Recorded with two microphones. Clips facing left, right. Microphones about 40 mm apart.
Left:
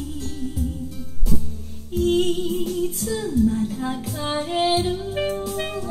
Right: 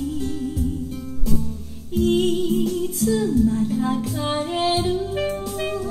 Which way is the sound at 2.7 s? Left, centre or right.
Centre.